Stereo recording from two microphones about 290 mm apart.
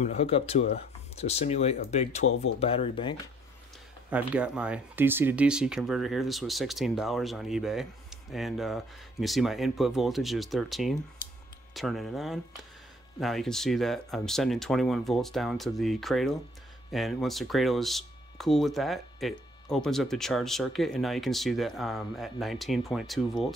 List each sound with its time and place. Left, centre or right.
0.0 s speech: left
4.1 s speech: centre